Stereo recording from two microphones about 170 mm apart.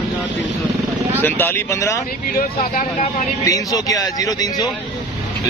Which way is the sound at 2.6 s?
40° left (ahead or behind).